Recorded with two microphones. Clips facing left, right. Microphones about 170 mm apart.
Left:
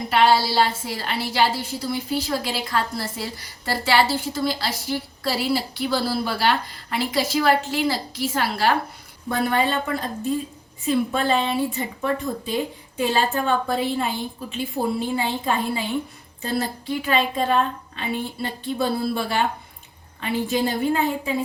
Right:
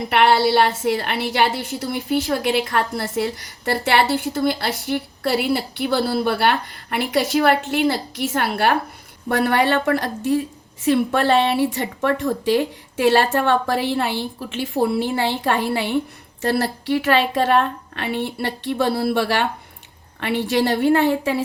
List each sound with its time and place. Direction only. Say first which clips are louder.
0.1 s a woman's voice: right 3 dB; 65° right (ahead or behind)
9.3 s a woman's voice: right 4 dB; 70° right (ahead or behind)